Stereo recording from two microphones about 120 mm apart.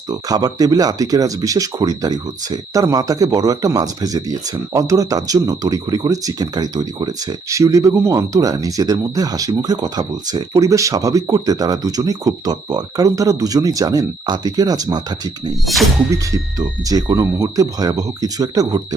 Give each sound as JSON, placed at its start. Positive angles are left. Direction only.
{"t": 0.1, "sound": "speech", "side_deg": -30}
{"t": 15.6, "sound": "speech", "side_deg": 0}
{"t": 16.3, "sound": "speech", "side_deg": -30}